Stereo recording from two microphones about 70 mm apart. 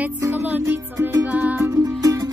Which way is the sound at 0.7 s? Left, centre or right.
Right.